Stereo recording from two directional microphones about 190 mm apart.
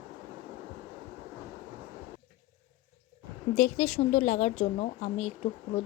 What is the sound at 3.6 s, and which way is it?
A woman's voice, 40° left (ahead or behind).